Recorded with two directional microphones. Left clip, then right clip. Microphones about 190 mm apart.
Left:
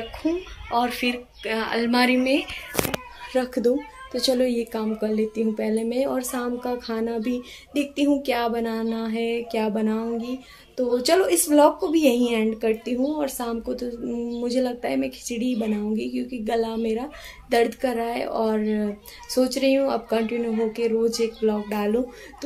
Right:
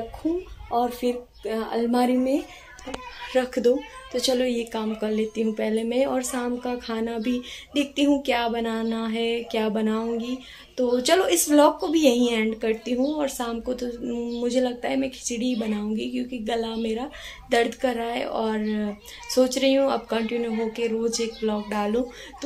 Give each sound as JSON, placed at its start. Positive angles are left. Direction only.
{"t": 0.7, "sound": "speech", "side_deg": 15}
{"t": 1.4, "sound": "a woman's voice", "side_deg": -10}
{"t": 2.9, "sound": "a woman's voice", "side_deg": 0}